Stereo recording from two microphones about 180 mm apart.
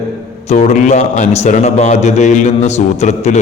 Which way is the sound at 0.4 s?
40° left (ahead or behind).